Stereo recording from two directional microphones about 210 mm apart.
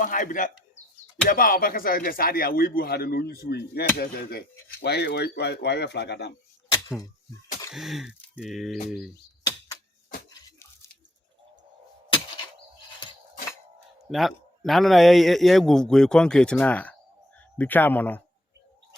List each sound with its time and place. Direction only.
0.0 s speech: 40° left (ahead or behind)
7.7 s a man's voice: centre (ahead or behind)
10.2 s tearing: 20° left (ahead or behind)
13.0 s a sound: 20° left (ahead or behind)
14.1 s a man's voice: centre (ahead or behind)